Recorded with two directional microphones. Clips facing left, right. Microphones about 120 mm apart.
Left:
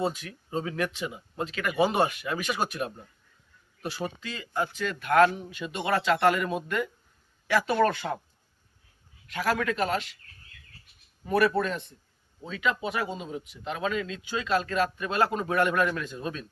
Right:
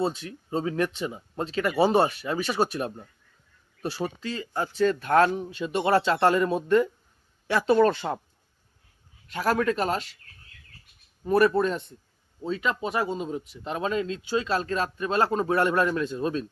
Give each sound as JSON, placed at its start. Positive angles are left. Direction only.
{"t": 0.0, "sound": "speech", "side_deg": -30}
{"t": 9.2, "sound": "speech", "side_deg": -35}
{"t": 11.3, "sound": "speech", "side_deg": -35}